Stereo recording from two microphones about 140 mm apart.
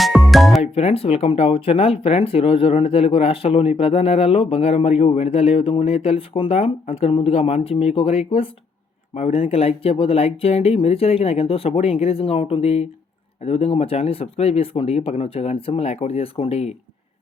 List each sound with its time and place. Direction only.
0.0 s music: centre (ahead or behind)
0.6 s speech: 45° left (ahead or behind)